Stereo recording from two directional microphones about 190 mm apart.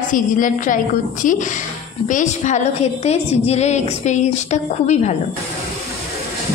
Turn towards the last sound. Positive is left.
turn(degrees=40)  # may be behind; listen again after turning